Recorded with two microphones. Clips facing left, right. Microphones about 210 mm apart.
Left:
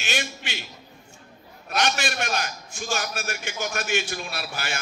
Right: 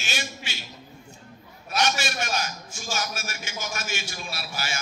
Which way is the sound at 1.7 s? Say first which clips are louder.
Left 1 dB; 60° left (ahead or behind).